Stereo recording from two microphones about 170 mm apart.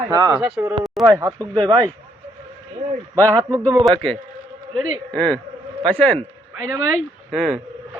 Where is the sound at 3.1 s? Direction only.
20° right (ahead or behind).